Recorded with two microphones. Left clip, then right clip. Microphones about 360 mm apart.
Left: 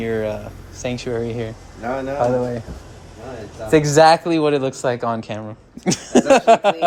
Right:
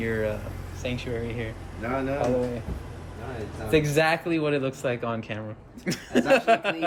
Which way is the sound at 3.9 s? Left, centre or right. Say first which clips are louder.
Left 11 dB; centre.